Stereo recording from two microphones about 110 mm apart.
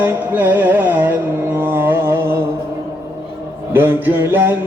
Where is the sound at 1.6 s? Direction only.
20° right (ahead or behind).